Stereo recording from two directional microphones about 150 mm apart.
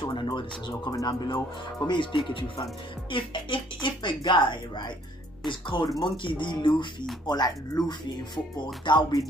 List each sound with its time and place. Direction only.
0.0 s speech: 30° left (ahead or behind)